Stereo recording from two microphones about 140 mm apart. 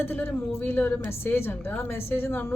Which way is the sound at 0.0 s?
15° left (ahead or behind).